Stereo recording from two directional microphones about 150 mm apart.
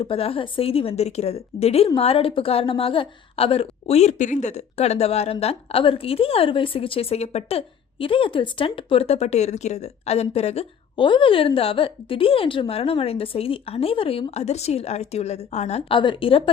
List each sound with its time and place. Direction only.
0.0 s a woman's voice: 40° left (ahead or behind)
16.0 s a woman's voice: 35° left (ahead or behind)